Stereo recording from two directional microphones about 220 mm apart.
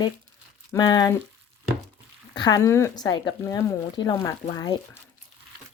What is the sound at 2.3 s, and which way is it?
Speech, 20° left (ahead or behind).